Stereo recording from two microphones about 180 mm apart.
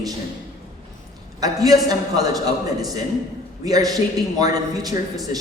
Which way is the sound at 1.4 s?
20° right (ahead or behind).